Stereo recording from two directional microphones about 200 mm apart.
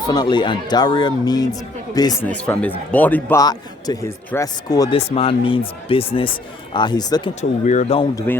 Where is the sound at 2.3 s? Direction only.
5° left (ahead or behind).